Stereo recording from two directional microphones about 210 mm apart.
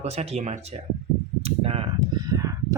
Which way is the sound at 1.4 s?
25° right (ahead or behind).